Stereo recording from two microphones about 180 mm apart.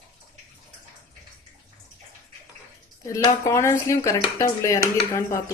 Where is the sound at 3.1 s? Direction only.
15° left (ahead or behind).